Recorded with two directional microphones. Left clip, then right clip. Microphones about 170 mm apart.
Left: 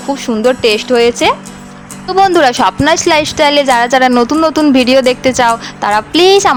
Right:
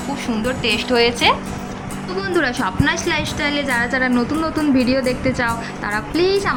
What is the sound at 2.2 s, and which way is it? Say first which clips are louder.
A woman's voice: left 11 dB; 45° left (ahead or behind).